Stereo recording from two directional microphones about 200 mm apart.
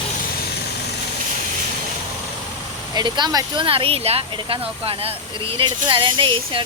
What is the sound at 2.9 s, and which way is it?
Speech, 20° right (ahead or behind).